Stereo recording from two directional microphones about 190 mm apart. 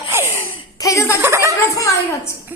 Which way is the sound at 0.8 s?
15° left (ahead or behind).